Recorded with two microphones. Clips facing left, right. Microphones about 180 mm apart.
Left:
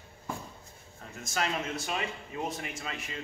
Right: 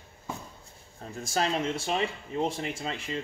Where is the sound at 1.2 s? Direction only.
30° right (ahead or behind).